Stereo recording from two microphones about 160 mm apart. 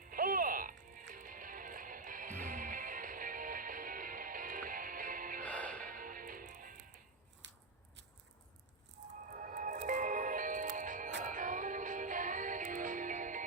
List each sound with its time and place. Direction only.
0.0 s music: 60° right (ahead or behind)
5.4 s music: 10° left (ahead or behind)
5.8 s music: 60° right (ahead or behind)
9.3 s music: 55° right (ahead or behind)